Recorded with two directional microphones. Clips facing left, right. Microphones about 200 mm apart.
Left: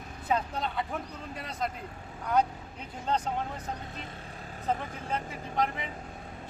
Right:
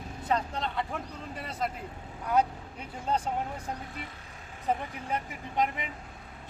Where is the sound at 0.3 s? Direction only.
5° left (ahead or behind).